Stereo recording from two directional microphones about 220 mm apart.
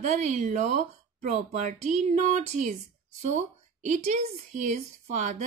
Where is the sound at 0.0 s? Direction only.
30° right (ahead or behind).